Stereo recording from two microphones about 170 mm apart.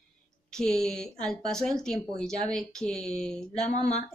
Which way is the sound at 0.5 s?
5° left (ahead or behind).